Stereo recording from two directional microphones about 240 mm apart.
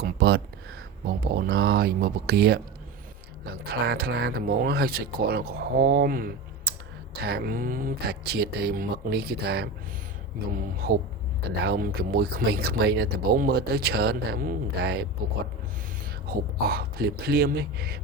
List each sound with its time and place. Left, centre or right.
0.0 s a sound: right
1.0 s speech: right
16.3 s speech: right